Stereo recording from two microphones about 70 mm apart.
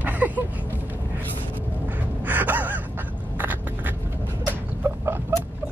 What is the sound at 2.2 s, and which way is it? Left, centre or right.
Gasp, right.